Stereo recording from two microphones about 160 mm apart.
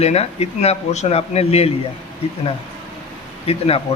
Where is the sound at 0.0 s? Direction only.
40° left (ahead or behind).